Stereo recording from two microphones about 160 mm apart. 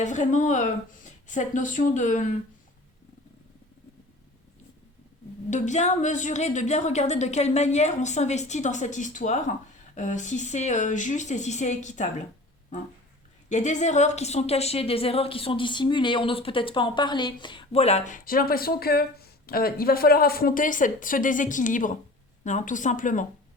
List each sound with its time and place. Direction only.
0.0 s a woman's voice: 50° left (ahead or behind)
5.5 s a woman's voice: 50° left (ahead or behind)
13.5 s a woman's voice: 50° left (ahead or behind)